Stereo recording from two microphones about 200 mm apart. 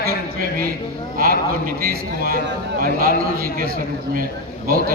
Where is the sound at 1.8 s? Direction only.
45° right (ahead or behind).